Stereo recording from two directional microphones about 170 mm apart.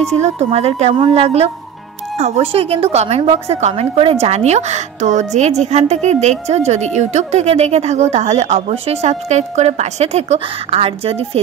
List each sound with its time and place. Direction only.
0.0 s a woman's voice: 40° right (ahead or behind)